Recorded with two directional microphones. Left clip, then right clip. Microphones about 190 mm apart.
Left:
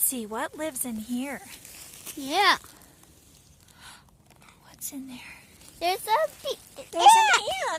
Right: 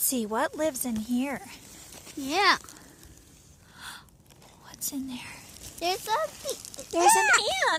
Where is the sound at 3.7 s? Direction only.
10° right (ahead or behind).